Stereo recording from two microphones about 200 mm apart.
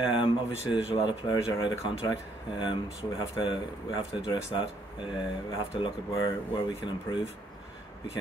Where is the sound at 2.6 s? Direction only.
25° left (ahead or behind).